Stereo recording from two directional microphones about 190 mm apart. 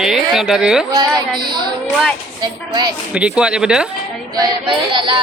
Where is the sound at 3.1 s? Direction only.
5° right (ahead or behind).